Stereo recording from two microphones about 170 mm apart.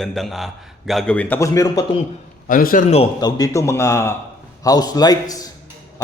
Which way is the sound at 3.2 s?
25° left (ahead or behind).